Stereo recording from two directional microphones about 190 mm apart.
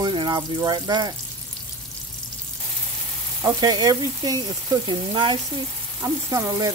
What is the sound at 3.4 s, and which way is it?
Speech, 20° right (ahead or behind).